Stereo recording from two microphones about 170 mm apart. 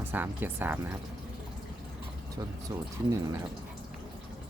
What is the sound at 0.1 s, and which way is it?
Speech, 10° right (ahead or behind).